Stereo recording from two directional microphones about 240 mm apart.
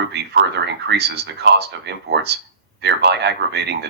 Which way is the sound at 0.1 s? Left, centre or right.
Right.